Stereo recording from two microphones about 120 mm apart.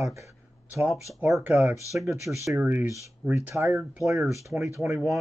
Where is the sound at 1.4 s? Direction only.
20° right (ahead or behind).